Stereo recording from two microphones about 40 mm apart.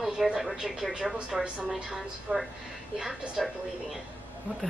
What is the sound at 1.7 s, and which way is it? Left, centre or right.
A woman's voice, centre.